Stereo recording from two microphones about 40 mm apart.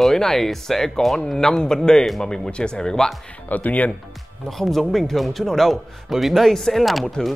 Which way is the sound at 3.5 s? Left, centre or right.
Left.